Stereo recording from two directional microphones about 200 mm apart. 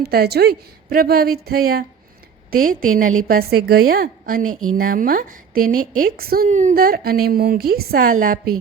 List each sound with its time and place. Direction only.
0.0 s a woman's voice: 50° right (ahead or behind)